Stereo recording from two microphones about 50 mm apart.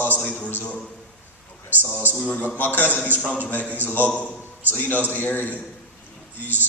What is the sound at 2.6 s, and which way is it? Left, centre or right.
A man's voice, left.